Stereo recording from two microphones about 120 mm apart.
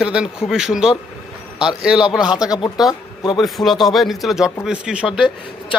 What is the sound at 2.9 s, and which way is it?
Speech, 35° left (ahead or behind).